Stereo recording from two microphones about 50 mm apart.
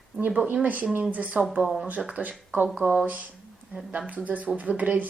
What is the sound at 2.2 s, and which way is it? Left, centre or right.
Speech, right.